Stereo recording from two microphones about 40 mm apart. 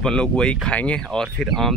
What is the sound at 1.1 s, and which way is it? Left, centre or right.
Speech, centre.